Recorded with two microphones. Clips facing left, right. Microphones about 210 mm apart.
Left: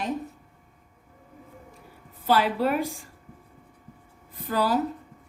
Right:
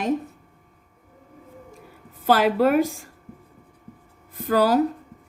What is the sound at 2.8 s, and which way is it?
Speech, 45° right (ahead or behind).